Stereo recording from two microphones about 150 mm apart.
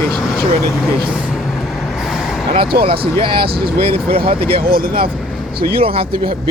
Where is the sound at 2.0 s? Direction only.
Centre (ahead or behind).